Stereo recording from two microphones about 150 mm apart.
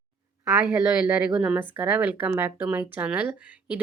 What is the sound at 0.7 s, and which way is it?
A woman's voice, 5° right (ahead or behind).